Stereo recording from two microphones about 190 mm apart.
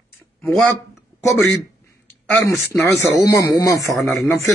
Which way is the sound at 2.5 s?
15° left (ahead or behind).